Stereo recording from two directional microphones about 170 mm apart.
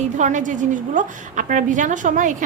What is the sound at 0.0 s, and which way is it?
A woman's voice, 45° right (ahead or behind).